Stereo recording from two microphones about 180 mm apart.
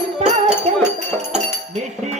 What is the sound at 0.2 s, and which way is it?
Music, 35° right (ahead or behind).